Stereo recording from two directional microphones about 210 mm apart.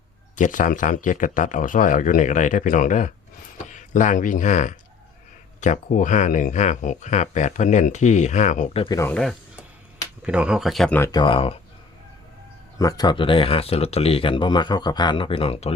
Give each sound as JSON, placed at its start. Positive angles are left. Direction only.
{"t": 0.3, "sound": "speech", "side_deg": 35}
{"t": 8.8, "sound": "speech", "side_deg": 15}
{"t": 10.2, "sound": "speech", "side_deg": -5}
{"t": 11.1, "sound": "speech", "side_deg": 25}
{"t": 12.8, "sound": "speech", "side_deg": 20}